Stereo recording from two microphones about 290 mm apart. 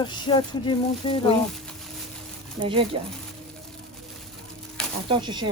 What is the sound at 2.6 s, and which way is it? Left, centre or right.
Speech, centre.